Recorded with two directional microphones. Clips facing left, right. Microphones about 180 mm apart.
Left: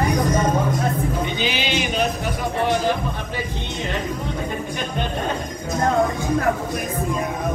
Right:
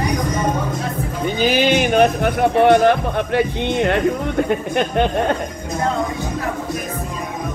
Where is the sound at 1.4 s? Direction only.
45° right (ahead or behind); by 5.1 s 60° right (ahead or behind).